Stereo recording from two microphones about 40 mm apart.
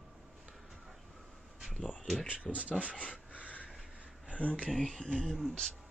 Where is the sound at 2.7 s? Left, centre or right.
Left.